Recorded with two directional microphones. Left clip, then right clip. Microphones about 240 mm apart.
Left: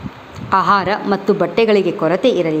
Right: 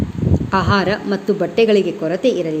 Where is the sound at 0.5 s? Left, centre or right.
Centre.